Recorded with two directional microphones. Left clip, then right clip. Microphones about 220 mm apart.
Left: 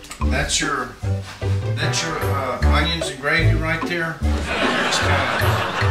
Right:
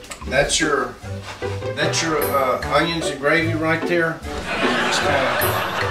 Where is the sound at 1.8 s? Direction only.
25° right (ahead or behind).